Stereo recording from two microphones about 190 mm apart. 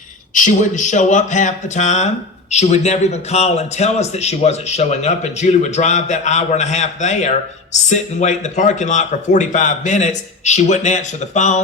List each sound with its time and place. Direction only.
0.3 s a man's voice: 40° left (ahead or behind)